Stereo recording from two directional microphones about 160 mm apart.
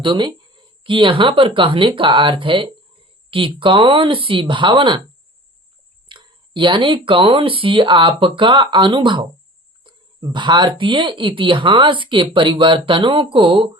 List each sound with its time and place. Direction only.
0.0 s speech: 30° right (ahead or behind)
6.1 s speech: 30° right (ahead or behind)